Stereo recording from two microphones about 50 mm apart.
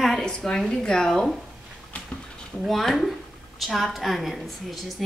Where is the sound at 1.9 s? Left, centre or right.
Left.